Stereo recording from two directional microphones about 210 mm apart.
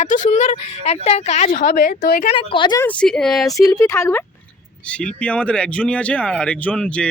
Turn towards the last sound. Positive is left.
turn(degrees=5)  # may be behind; listen again after turning